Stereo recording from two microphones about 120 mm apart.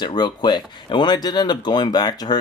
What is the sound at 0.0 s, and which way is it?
Speech, 40° left (ahead or behind).